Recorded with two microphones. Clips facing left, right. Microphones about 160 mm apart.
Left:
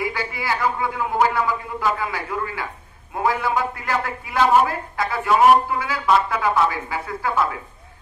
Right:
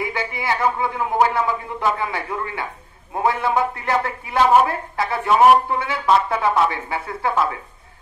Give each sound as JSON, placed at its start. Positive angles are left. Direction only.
{"t": 0.0, "sound": "a man's voice", "side_deg": -20}